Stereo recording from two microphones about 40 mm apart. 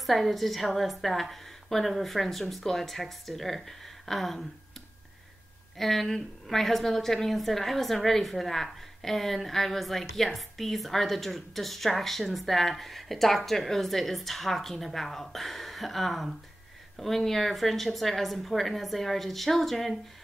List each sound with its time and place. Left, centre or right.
0.0 s a woman's voice: centre
5.8 s a woman's voice: centre